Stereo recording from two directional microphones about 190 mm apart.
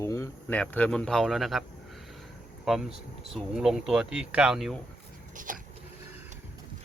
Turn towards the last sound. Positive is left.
turn(degrees=-45)  # may be behind; listen again after turning